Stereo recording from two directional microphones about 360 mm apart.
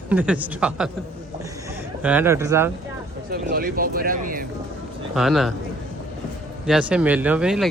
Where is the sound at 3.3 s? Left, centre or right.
Right.